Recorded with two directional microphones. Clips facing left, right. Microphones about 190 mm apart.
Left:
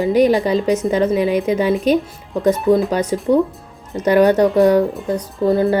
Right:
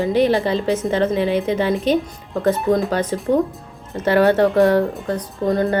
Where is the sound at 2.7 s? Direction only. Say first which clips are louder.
Left 3 dB; 10° left (ahead or behind).